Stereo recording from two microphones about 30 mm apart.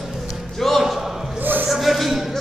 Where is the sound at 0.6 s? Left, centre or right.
Centre.